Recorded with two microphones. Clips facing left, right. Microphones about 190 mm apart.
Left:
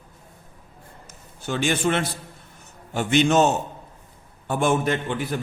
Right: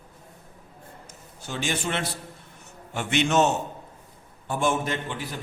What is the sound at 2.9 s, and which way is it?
Speech, 35° left (ahead or behind).